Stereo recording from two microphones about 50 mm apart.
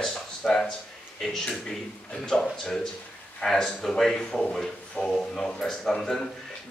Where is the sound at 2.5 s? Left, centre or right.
Centre.